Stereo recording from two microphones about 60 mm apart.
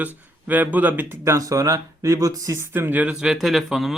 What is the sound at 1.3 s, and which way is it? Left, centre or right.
Speech, right.